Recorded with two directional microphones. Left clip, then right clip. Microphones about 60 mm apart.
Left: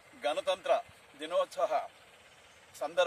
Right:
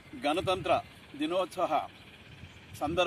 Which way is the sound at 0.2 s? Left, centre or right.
Left.